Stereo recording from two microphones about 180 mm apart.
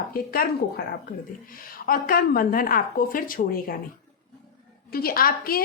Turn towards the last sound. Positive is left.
turn(degrees=55)  # may be behind; listen again after turning